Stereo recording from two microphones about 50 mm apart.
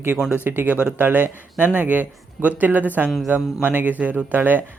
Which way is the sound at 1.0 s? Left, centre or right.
Right.